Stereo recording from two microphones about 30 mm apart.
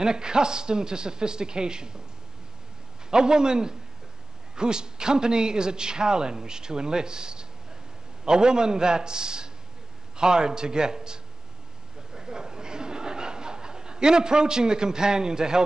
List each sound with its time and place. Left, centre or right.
0.0 s a man's voice: right
3.1 s a man's voice: right
12.1 s a sound: right